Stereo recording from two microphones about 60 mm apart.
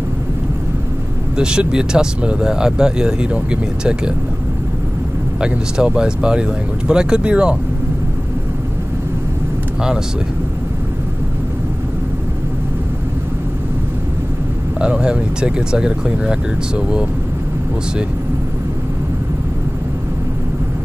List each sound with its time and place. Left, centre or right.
1.3 s speech: centre
5.4 s speech: centre
14.8 s speech: centre